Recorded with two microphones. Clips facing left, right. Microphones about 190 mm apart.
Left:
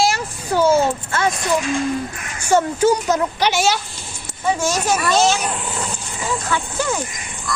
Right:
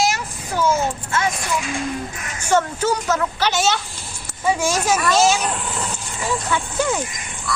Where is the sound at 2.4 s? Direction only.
10° left (ahead or behind).